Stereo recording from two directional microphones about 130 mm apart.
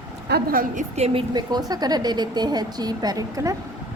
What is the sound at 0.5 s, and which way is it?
Speech, 75° right (ahead or behind).